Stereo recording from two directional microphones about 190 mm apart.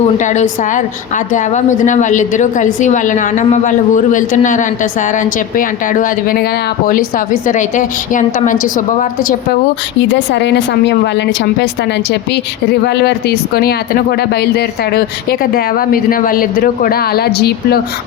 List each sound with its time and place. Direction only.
0.2 s a woman's voice: 40° left (ahead or behind)
10.0 s speech: 65° left (ahead or behind)
12.8 s speech: 60° left (ahead or behind)